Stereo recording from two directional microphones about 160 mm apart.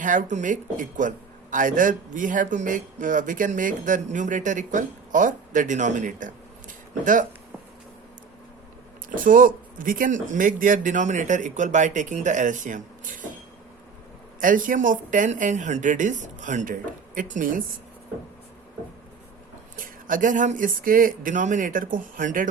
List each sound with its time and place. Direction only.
0.0 s speech: 55° right (ahead or behind)
9.2 s speech: 60° right (ahead or behind)
14.4 s speech: 55° right (ahead or behind)
19.7 s speech: 60° right (ahead or behind)